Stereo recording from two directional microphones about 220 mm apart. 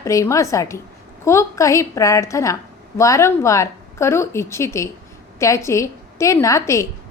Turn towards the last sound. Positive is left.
turn(degrees=15)  # may be behind; listen again after turning